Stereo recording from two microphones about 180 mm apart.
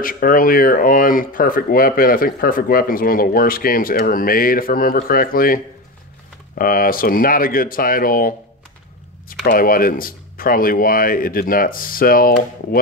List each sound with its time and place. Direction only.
0.0 s speech: 50° left (ahead or behind)
6.6 s speech: 50° left (ahead or behind)